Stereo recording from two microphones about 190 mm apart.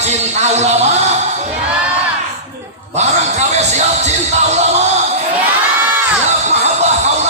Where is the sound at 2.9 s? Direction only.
35° right (ahead or behind).